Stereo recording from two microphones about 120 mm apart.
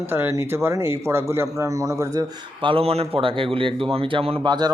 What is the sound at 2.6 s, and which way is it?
Speech, 50° right (ahead or behind).